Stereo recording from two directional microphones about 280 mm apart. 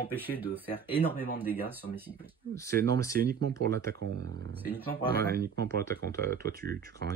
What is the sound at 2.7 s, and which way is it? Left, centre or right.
Speech, right.